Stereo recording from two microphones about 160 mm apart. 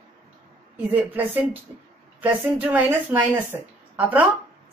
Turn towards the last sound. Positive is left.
turn(degrees=-10)  # may be behind; listen again after turning